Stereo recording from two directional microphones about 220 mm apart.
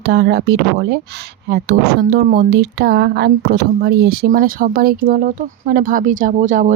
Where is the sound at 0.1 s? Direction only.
50° right (ahead or behind).